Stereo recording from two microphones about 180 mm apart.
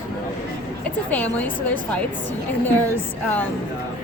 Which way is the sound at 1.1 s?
10° left (ahead or behind).